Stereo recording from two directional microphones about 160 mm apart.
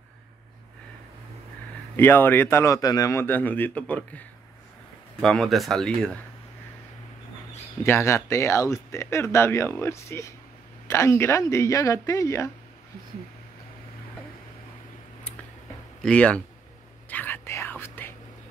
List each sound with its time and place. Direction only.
2.0 s speech: 15° left (ahead or behind)
5.2 s speech: centre (ahead or behind)
7.8 s speech: 15° left (ahead or behind)
16.0 s speech: 5° left (ahead or behind)
17.1 s whispering: 10° left (ahead or behind)